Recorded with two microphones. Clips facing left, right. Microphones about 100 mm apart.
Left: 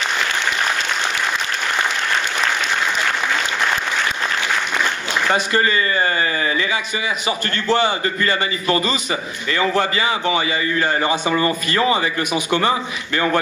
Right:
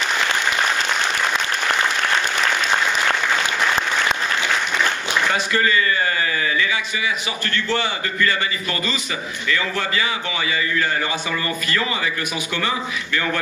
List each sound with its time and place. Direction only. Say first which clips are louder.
5.3 s a man's voice: left 4 dB; 35° left (ahead or behind)